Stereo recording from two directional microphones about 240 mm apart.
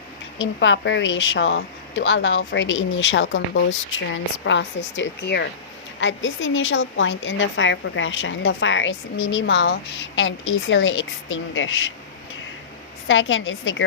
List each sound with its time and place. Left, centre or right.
0.3 s speech: left
13.1 s speech: left